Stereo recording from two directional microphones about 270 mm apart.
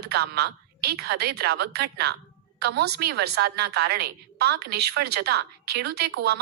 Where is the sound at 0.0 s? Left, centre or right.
Right.